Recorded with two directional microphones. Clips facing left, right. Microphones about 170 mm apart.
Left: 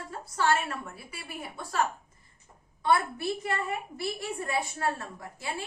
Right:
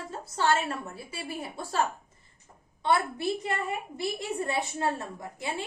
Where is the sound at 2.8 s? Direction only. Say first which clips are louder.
Even; 20° right (ahead or behind).